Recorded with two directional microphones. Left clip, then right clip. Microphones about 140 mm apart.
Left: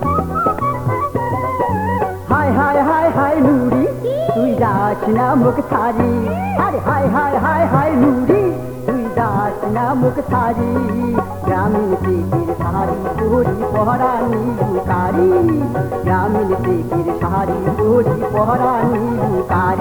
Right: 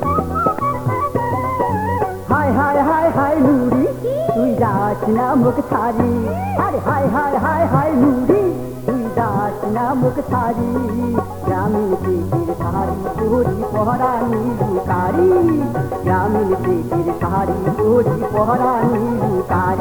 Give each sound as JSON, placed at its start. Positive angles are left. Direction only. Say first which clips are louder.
{"t": 0.1, "sound": "music", "louder": "left 1 dB", "side_deg": -35}
{"t": 13.3, "sound": "music", "louder": "left 2 dB", "side_deg": -35}